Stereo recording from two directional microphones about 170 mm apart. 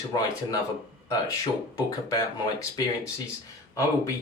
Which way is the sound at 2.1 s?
20° left (ahead or behind).